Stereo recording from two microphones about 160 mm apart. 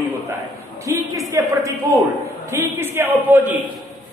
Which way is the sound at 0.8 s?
20° right (ahead or behind).